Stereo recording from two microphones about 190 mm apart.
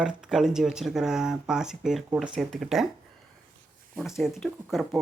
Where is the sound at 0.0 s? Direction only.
5° right (ahead or behind).